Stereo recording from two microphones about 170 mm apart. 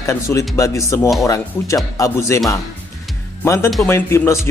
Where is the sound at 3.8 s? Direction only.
15° left (ahead or behind).